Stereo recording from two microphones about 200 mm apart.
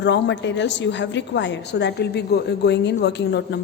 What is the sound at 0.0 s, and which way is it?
A woman's voice, 60° left (ahead or behind).